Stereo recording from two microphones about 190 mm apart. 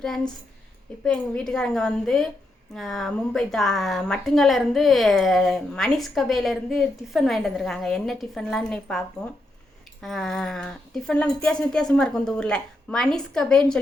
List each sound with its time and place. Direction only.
1.0 s a woman's voice: 5° left (ahead or behind)